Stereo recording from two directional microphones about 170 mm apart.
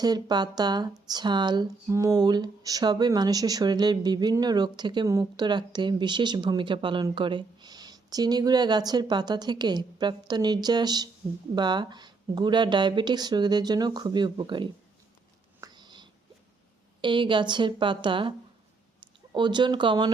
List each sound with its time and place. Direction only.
0.0 s speech: 25° right (ahead or behind)
15.6 s whispering: 25° right (ahead or behind)
17.0 s speech: 30° right (ahead or behind)